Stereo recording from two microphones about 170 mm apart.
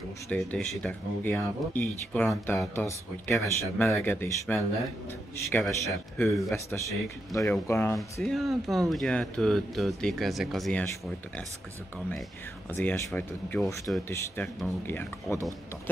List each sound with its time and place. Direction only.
0.3 s speech: 5° left (ahead or behind)
8.2 s speech: centre (ahead or behind)
12.6 s speech: 10° left (ahead or behind)